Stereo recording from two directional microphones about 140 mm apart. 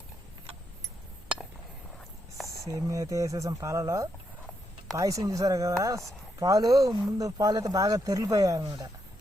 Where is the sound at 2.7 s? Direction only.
25° right (ahead or behind).